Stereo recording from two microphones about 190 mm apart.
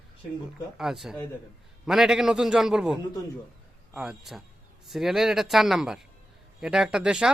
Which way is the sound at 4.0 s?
Centre (ahead or behind).